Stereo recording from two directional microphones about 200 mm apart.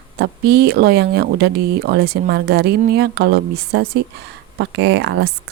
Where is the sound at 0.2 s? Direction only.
55° right (ahead or behind).